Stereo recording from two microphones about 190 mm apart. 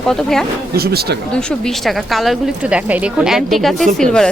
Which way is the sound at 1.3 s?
5° left (ahead or behind).